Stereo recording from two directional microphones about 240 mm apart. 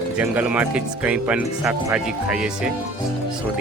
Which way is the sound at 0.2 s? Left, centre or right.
Centre.